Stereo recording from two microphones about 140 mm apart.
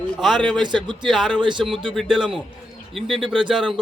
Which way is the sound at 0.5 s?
35° right (ahead or behind).